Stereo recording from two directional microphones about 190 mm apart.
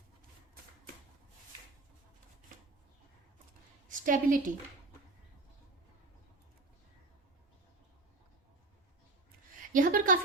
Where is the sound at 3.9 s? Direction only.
45° right (ahead or behind).